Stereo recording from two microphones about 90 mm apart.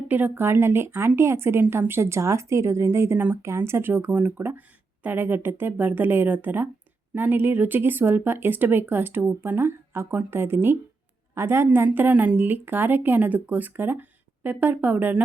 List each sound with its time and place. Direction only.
0.1 s a woman's voice: 20° right (ahead or behind)